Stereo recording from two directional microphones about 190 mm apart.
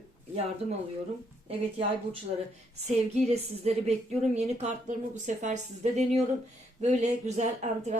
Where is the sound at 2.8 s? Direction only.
35° right (ahead or behind).